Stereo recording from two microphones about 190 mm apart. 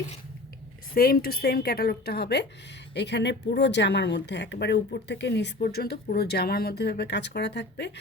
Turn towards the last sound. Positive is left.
turn(degrees=65)  # may be behind; listen again after turning